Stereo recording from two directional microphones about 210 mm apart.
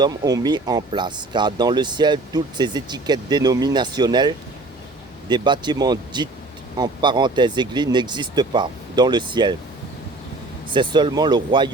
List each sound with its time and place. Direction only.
0.0 s speech: 20° right (ahead or behind)
10.7 s speech: 25° right (ahead or behind)